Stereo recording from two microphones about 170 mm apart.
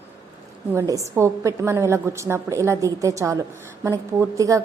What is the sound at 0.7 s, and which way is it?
A woman's voice, 15° right (ahead or behind).